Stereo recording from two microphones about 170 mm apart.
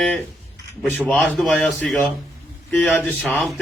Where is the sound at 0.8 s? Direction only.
5° left (ahead or behind).